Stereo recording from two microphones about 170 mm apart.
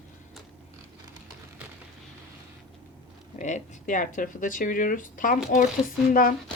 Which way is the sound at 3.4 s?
45° left (ahead or behind).